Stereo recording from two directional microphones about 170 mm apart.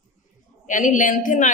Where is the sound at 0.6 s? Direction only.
50° left (ahead or behind).